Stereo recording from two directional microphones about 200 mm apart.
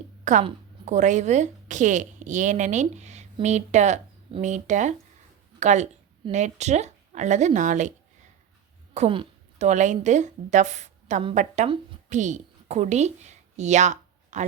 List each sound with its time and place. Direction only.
0.3 s a woman's voice: 35° right (ahead or behind)
9.0 s a woman's voice: 30° right (ahead or behind)